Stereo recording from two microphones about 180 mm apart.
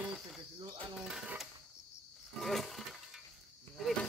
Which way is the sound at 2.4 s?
Centre (ahead or behind).